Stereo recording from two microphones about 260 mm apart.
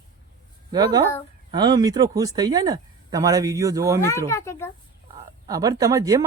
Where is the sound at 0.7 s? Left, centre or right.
Centre.